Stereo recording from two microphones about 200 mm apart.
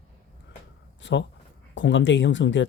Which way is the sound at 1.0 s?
60° left (ahead or behind).